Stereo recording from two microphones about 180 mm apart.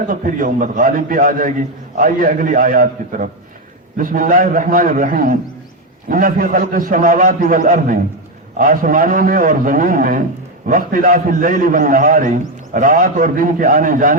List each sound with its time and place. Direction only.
0.1 s a man's voice: 50° right (ahead or behind)